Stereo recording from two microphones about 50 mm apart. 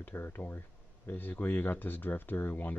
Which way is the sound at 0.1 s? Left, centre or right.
Left.